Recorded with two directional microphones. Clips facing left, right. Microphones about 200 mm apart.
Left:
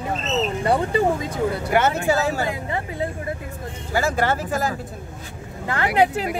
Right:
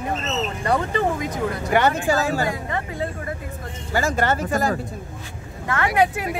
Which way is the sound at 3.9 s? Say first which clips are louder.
Even; 10° left (ahead or behind).